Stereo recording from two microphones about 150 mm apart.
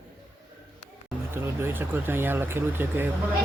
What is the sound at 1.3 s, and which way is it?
Speech, 15° right (ahead or behind).